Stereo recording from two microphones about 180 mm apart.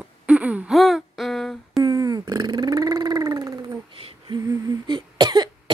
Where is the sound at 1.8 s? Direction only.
20° right (ahead or behind).